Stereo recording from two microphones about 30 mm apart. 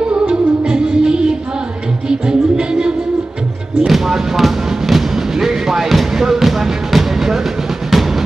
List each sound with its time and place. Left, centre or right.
0.3 s music: right
3.8 s music: centre
5.1 s fireworks: centre
6.1 s music: centre
7.9 s music: centre